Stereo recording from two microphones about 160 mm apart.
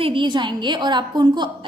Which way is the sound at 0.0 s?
30° right (ahead or behind).